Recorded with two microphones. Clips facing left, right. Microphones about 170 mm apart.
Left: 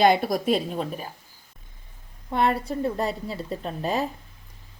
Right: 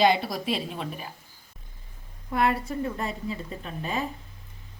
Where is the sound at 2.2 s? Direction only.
30° left (ahead or behind).